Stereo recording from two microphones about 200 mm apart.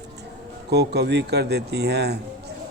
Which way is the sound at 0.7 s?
55° right (ahead or behind).